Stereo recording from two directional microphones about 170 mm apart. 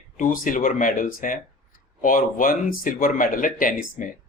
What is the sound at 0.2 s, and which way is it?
Speech, 50° left (ahead or behind).